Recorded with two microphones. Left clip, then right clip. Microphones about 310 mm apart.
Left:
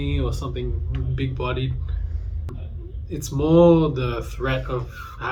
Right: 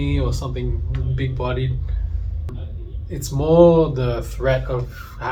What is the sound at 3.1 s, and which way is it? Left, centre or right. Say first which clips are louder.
Speech: right 2 dB; centre.